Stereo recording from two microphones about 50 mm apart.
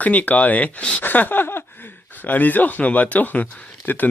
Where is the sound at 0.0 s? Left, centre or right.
Left.